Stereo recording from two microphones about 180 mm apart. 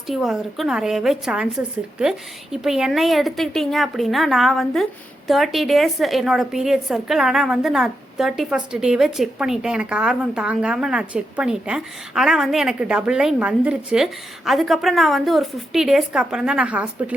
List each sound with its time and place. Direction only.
0.1 s a woman's voice: centre (ahead or behind)